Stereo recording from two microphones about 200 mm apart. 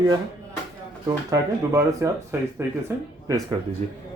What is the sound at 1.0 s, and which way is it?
Speech, 15° right (ahead or behind).